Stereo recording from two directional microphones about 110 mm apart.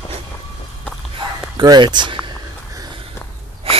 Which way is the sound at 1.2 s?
40° right (ahead or behind).